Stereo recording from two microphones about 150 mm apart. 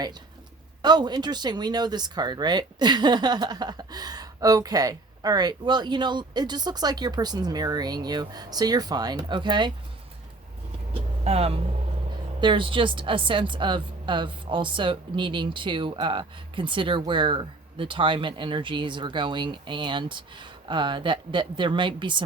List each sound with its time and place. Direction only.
0.8 s speech: 30° right (ahead or behind)
11.2 s a woman's voice: 45° right (ahead or behind)